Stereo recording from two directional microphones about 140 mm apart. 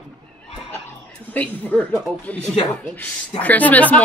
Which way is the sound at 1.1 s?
10° left (ahead or behind).